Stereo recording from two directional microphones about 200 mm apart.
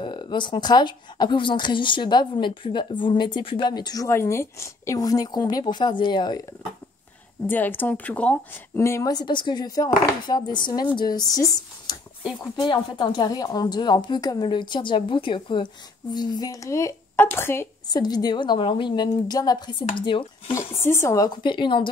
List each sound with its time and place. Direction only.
0.0 s a woman's voice: 25° left (ahead or behind)
7.4 s a woman's voice: 10° left (ahead or behind)
20.8 s a woman's voice: 15° left (ahead or behind)